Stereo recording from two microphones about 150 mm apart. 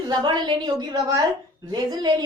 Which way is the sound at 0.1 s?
30° right (ahead or behind).